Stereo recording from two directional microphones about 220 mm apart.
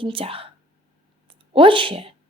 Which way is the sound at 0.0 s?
25° right (ahead or behind).